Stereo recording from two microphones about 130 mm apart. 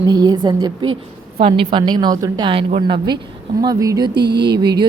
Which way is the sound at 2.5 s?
45° right (ahead or behind).